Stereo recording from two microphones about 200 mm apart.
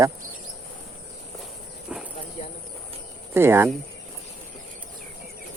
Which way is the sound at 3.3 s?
10° right (ahead or behind).